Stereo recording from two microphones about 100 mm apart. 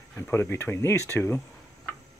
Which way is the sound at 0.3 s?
25° left (ahead or behind).